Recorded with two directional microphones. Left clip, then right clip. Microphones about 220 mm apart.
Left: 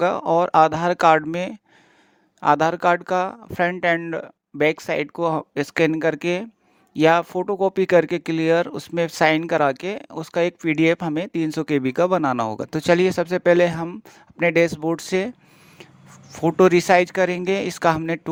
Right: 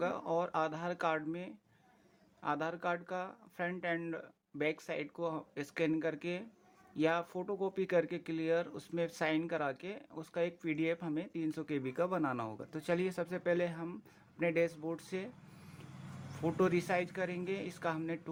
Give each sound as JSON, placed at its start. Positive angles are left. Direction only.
{"t": 0.0, "sound": "speech", "side_deg": 50}
{"t": 16.3, "sound": "speech", "side_deg": 45}